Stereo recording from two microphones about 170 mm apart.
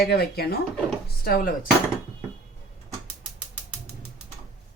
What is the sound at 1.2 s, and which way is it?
Speech, 60° left (ahead or behind).